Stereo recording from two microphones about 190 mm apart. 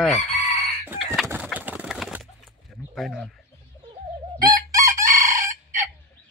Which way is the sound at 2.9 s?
Centre (ahead or behind).